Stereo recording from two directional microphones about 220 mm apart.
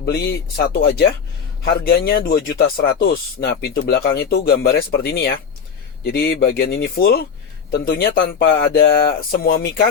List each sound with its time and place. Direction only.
0.0 s speech: 45° left (ahead or behind)